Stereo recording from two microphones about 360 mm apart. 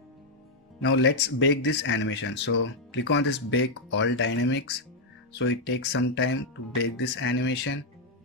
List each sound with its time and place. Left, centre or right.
0.7 s speech: left